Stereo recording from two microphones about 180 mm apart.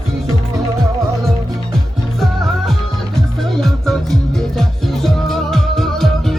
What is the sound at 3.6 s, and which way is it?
Music, centre (ahead or behind).